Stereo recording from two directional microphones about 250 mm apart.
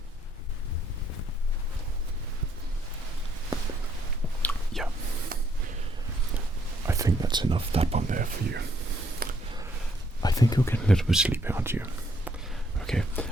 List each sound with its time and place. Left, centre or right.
4.4 s whispering: centre
5.3 s snort: right
6.8 s speech: centre; by 8.6 s right
9.2 s a sound: right
10.2 s speech: centre
10.8 s speech: centre
12.8 s a sound: centre